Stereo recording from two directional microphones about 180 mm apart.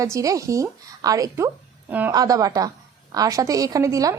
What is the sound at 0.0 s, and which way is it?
A woman's voice, 20° right (ahead or behind).